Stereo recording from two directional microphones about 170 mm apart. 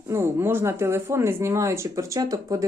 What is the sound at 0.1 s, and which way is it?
Speech, 15° right (ahead or behind).